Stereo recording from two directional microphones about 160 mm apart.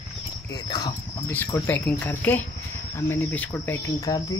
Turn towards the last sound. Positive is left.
turn(degrees=25)  # may be behind; listen again after turning